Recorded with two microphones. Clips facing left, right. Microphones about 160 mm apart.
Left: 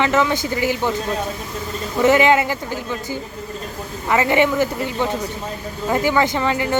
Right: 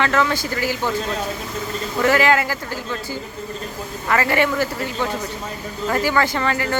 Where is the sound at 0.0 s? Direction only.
15° left (ahead or behind).